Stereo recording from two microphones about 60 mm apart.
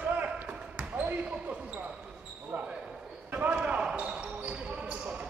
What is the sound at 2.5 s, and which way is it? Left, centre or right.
Basketball bounce, right.